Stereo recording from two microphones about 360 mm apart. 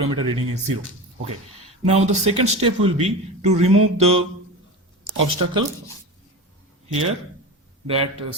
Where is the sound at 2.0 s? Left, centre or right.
Centre.